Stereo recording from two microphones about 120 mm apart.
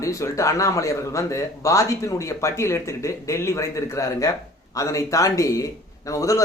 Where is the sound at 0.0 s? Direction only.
25° left (ahead or behind).